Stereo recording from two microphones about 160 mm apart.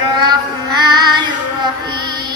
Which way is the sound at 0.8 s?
25° right (ahead or behind).